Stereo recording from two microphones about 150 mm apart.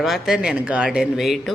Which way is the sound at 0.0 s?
Centre (ahead or behind).